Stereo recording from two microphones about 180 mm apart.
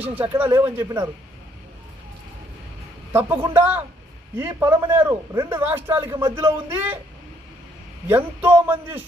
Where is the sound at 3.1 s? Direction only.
15° right (ahead or behind).